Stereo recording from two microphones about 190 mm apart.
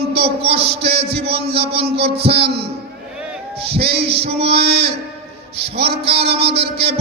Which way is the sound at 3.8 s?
30° right (ahead or behind).